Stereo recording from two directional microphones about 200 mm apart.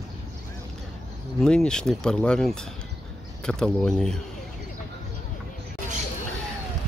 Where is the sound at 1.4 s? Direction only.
5° left (ahead or behind).